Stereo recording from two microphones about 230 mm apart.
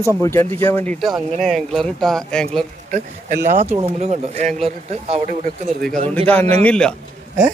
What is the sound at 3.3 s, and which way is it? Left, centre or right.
Speech, centre.